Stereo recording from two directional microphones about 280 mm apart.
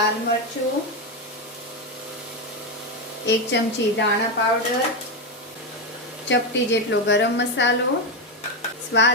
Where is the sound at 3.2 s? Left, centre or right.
Left.